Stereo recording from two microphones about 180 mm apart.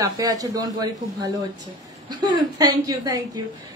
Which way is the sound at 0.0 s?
20° right (ahead or behind).